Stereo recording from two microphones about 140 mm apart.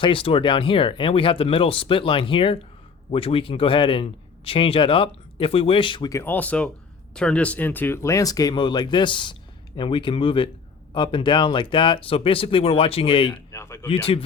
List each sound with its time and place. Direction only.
0.0 s speech: 40° left (ahead or behind)
6.1 s speech: 15° left (ahead or behind); by 13.3 s 40° left (ahead or behind)
13.5 s speech: 20° left (ahead or behind)
13.8 s speech: 45° left (ahead or behind)